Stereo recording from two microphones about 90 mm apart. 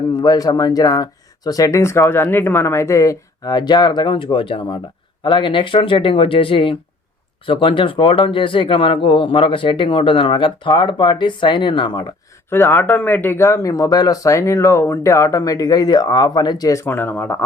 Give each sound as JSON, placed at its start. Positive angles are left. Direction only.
{"t": 0.2, "sound": "speech", "side_deg": 45}
{"t": 5.2, "sound": "speech", "side_deg": 65}
{"t": 12.5, "sound": "speech", "side_deg": 25}
{"t": 16.8, "sound": "speech", "side_deg": 20}